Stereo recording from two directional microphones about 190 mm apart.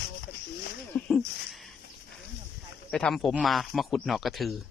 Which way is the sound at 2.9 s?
5° left (ahead or behind).